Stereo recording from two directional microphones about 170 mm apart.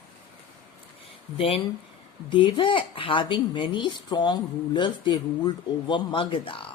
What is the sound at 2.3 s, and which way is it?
Speech, 30° left (ahead or behind).